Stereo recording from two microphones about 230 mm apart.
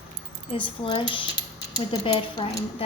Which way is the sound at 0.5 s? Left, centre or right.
Left.